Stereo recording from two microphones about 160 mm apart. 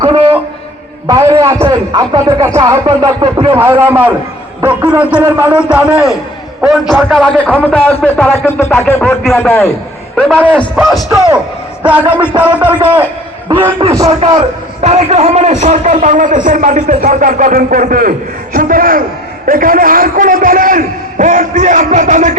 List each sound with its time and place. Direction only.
0.0 s a sound: 35° right (ahead or behind)
1.0 s music: 25° right (ahead or behind)
1.5 s a man's voice: 15° right (ahead or behind)
1.9 s music: 20° right (ahead or behind)
3.5 s a man's voice: 15° right (ahead or behind)
13.5 s music: 25° right (ahead or behind)
14.8 s a man's voice: 40° right (ahead or behind)